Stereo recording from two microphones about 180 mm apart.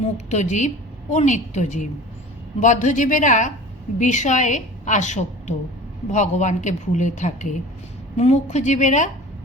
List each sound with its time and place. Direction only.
0.3 s a woman's voice: 40° left (ahead or behind)